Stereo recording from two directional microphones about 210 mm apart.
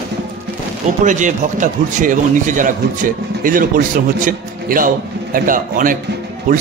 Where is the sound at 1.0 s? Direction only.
35° right (ahead or behind).